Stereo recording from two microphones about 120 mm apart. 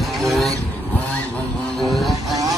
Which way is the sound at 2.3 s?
30° right (ahead or behind).